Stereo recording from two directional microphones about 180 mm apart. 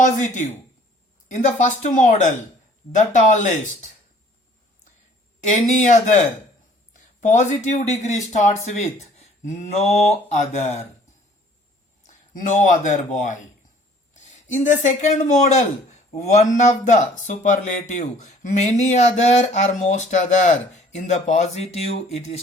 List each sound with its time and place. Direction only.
0.0 s speech: 45° left (ahead or behind)
5.5 s speech: 45° left (ahead or behind)
12.0 s speech: 45° left (ahead or behind)
14.1 s a sound: 40° left (ahead or behind)
14.5 s speech: 45° left (ahead or behind)